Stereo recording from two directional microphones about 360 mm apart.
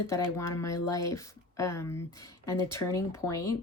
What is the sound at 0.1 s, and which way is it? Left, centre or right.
Speech, centre.